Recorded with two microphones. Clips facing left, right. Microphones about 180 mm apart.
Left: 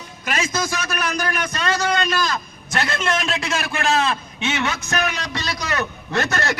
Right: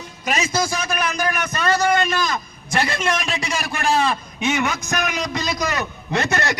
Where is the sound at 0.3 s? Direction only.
10° right (ahead or behind).